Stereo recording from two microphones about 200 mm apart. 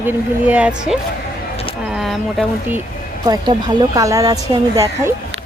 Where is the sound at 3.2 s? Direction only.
20° right (ahead or behind).